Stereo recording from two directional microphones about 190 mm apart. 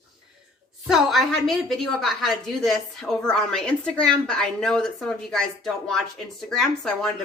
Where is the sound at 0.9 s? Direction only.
Centre (ahead or behind).